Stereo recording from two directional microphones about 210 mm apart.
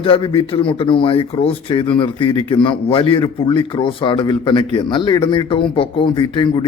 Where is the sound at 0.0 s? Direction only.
25° left (ahead or behind).